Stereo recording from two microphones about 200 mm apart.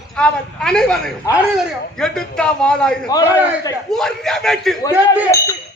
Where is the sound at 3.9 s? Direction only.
Centre (ahead or behind).